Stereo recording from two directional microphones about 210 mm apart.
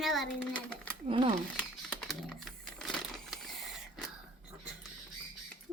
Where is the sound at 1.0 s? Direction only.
25° right (ahead or behind).